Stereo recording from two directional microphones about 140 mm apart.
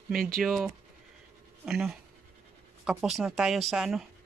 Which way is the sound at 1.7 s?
5° right (ahead or behind).